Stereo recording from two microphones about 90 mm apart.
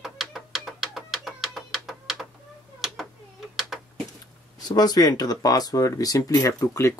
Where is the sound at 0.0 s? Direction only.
Centre (ahead or behind).